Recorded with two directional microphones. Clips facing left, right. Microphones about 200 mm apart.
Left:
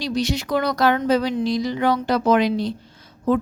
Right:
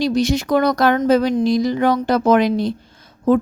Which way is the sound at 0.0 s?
50° right (ahead or behind).